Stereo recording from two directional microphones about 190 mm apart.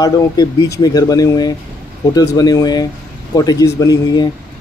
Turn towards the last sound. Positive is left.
turn(degrees=20)  # may be behind; listen again after turning